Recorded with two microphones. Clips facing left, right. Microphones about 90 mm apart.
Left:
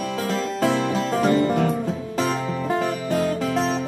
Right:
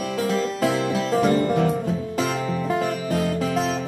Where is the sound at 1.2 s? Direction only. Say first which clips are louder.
Left 2 dB; 30° left (ahead or behind).